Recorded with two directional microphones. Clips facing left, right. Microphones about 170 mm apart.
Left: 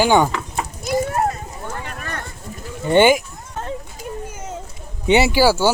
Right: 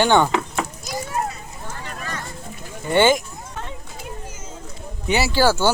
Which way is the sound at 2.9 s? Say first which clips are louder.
Left 3 dB; 15° left (ahead or behind).